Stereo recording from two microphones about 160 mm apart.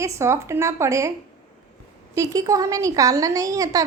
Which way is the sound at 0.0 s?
15° right (ahead or behind).